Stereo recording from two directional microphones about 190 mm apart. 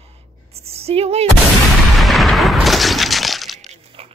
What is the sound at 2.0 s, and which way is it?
Breaking, centre (ahead or behind).